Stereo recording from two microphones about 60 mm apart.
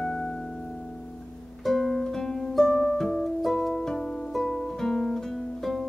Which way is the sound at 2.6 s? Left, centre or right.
Centre.